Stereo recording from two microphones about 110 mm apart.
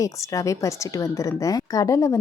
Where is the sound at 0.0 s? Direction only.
30° left (ahead or behind).